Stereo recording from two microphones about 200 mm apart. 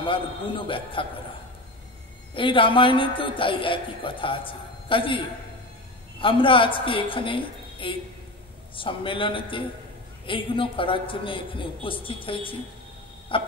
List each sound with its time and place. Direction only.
0.0 s a man's voice: 25° left (ahead or behind)
2.3 s a man's voice: 25° left (ahead or behind)
6.2 s a man's voice: 25° left (ahead or behind)